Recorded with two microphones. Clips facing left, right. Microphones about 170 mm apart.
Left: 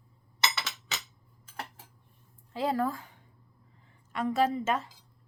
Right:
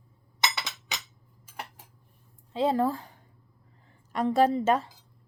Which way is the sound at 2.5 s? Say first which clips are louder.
Right 4 dB; 25° right (ahead or behind).